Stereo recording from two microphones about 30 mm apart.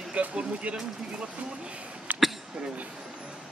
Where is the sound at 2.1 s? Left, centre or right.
Right.